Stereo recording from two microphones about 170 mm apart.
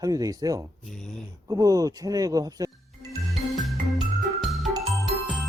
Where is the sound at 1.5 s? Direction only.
20° right (ahead or behind).